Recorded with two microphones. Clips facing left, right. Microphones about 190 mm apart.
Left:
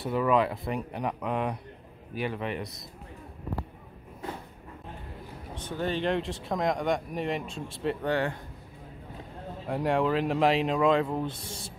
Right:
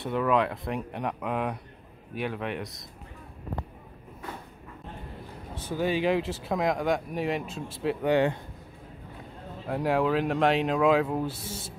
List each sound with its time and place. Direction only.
0.0 s speech: centre (ahead or behind)
5.5 s speech: 5° right (ahead or behind)
8.1 s a man's voice: 20° right (ahead or behind)
9.7 s speech: centre (ahead or behind)